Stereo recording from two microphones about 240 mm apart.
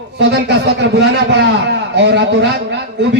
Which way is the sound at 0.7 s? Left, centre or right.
Right.